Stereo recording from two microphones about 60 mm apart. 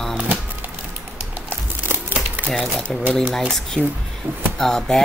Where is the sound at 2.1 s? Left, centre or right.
Right.